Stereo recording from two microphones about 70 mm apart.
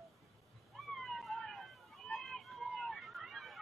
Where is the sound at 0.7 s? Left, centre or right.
Centre.